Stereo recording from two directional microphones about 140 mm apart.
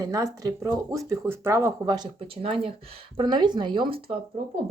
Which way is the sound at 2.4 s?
45° right (ahead or behind).